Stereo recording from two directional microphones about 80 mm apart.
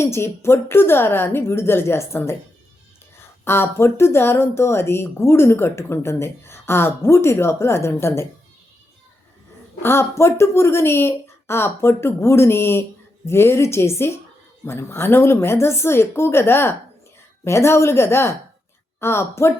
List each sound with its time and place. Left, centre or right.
0.0 s speech: left
9.8 s speech: left